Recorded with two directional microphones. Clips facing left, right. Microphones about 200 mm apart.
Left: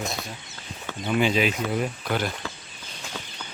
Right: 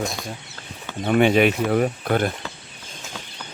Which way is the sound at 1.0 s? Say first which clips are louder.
Right 6 dB; 60° right (ahead or behind).